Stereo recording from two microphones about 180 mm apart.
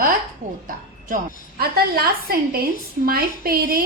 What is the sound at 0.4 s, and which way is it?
Speech, 40° right (ahead or behind).